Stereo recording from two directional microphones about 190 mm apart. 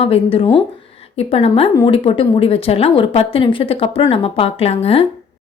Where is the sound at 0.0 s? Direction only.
30° left (ahead or behind).